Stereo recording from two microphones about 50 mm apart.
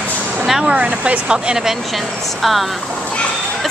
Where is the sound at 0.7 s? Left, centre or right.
Right.